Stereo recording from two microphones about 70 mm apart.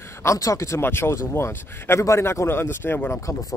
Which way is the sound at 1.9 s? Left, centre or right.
Left.